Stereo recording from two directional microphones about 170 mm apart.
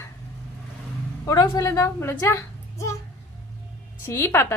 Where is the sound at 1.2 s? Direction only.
20° left (ahead or behind).